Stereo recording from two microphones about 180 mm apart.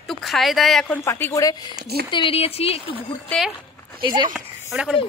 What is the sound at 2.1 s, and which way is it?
Speech, 30° left (ahead or behind).